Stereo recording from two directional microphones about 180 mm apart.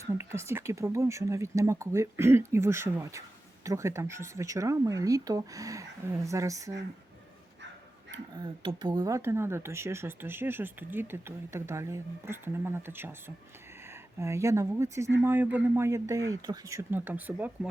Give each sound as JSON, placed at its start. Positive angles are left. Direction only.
{"t": 0.0, "sound": "speech", "side_deg": -15}
{"t": 8.4, "sound": "speech", "side_deg": -25}